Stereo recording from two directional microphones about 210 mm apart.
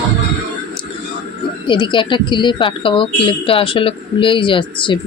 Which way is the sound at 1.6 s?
25° left (ahead or behind).